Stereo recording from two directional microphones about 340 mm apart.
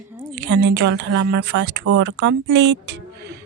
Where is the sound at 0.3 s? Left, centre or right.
Right.